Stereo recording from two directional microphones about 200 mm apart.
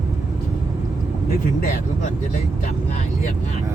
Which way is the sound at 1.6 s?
45° left (ahead or behind).